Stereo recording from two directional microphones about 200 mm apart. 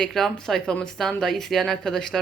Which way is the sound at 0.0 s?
Centre (ahead or behind).